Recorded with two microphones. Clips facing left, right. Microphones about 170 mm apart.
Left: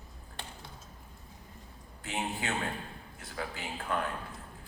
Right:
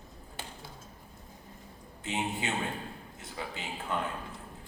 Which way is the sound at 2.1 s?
20° right (ahead or behind).